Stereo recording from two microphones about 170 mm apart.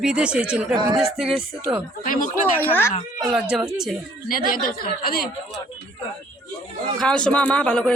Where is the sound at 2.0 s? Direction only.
50° left (ahead or behind).